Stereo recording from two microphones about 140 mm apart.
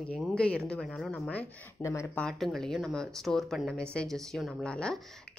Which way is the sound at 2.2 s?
Centre (ahead or behind).